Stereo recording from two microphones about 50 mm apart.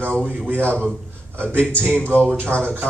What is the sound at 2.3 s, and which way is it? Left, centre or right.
Speech, right.